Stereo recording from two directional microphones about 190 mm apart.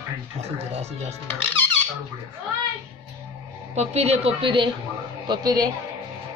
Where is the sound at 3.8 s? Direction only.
35° right (ahead or behind).